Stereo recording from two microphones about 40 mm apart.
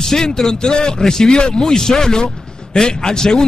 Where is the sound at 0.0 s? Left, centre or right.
Centre.